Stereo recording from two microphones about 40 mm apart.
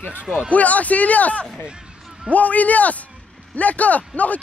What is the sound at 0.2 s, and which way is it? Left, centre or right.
Speech, right.